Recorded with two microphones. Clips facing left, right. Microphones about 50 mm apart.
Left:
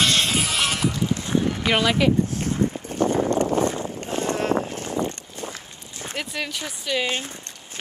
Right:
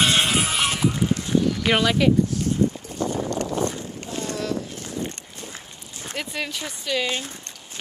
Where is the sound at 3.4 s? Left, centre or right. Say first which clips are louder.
Left 4 dB; left.